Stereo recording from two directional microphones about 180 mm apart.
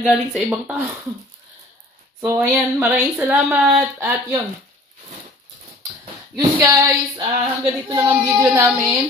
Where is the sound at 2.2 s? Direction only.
10° right (ahead or behind).